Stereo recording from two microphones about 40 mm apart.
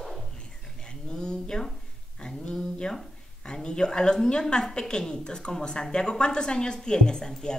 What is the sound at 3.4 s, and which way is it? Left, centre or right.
A woman's voice, left.